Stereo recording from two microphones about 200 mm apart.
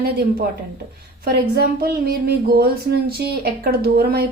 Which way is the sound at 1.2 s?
50° right (ahead or behind).